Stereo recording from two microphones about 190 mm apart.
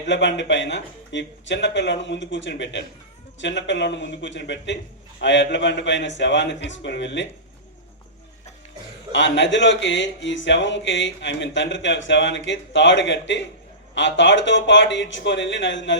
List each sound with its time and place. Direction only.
0.0 s speech: 70° left (ahead or behind)
9.1 s speech: 70° left (ahead or behind)